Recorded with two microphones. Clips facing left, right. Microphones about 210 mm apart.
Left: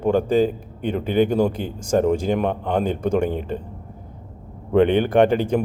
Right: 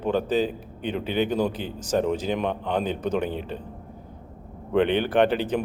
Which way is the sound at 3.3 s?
50° left (ahead or behind).